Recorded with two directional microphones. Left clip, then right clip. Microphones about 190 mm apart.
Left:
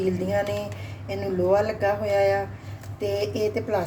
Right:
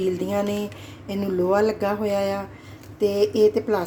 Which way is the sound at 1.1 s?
40° right (ahead or behind).